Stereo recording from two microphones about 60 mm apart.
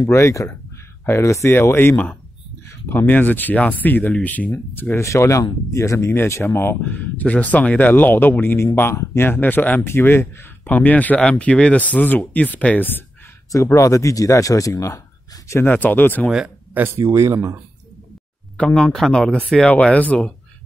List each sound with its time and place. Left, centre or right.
0.1 s speech: left
4.9 s speech: left
6.8 s speech: left
9.8 s speech: left
10.7 s speech: left
13.7 s speech: left
15.6 s speech: left
17.1 s speech: right
18.6 s speech: centre
18.9 s speech: centre
19.7 s speech: left